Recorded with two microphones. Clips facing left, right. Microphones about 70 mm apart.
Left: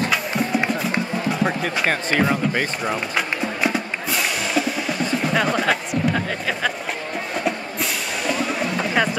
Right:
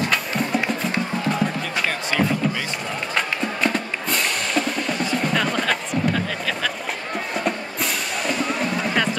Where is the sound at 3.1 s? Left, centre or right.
Centre.